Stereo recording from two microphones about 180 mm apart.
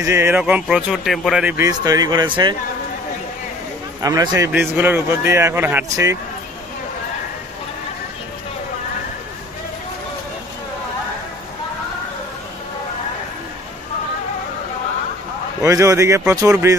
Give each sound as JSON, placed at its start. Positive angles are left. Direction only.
{"t": 0.0, "sound": "speech", "side_deg": -15}
{"t": 1.7, "sound": "speech", "side_deg": -20}
{"t": 4.0, "sound": "speech", "side_deg": -20}
{"t": 15.6, "sound": "speech", "side_deg": -15}